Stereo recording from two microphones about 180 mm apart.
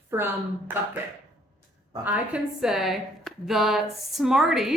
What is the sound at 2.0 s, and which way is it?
A woman's voice, 5° right (ahead or behind).